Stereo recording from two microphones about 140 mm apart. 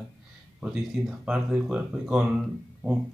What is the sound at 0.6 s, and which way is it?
Speech, 5° right (ahead or behind).